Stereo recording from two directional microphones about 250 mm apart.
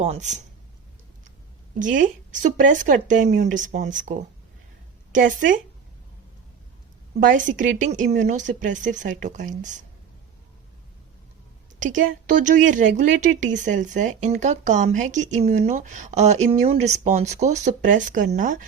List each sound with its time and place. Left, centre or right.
0.0 s speech: right
1.8 s speech: right
7.3 s speech: right
11.8 s a woman's voice: right